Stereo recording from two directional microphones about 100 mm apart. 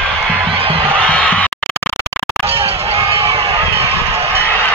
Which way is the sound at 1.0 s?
10° left (ahead or behind).